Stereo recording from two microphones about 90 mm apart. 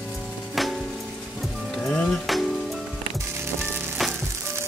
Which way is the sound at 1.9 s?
5° left (ahead or behind).